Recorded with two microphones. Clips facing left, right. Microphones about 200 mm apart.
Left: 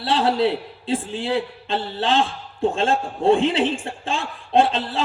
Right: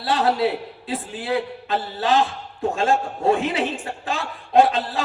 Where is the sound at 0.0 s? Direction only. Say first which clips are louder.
Left 1 dB; 30° left (ahead or behind).